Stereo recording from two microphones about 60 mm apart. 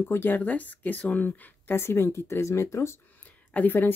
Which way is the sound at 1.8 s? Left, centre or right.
Left.